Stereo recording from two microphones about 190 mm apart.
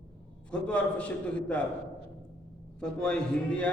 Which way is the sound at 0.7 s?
5° left (ahead or behind).